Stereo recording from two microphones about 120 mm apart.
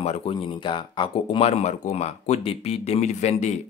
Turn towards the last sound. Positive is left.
turn(degrees=70)  # may be behind; listen again after turning